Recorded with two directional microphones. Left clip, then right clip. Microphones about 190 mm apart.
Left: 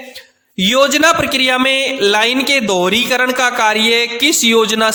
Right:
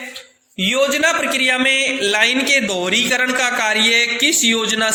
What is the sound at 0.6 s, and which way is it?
A man's voice, 50° left (ahead or behind).